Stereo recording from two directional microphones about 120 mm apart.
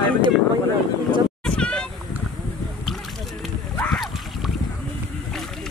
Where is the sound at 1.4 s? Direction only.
10° left (ahead or behind).